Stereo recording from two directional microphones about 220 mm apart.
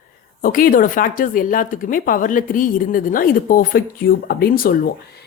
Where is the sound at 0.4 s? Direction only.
40° left (ahead or behind).